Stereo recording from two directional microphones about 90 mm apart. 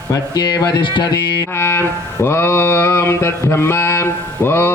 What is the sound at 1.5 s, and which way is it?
A man's voice, 25° left (ahead or behind).